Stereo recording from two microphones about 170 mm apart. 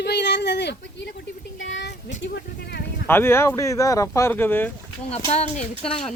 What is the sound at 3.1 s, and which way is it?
Speech, 15° left (ahead or behind).